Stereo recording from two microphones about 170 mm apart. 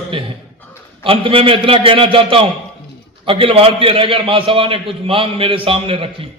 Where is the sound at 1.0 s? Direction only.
30° right (ahead or behind).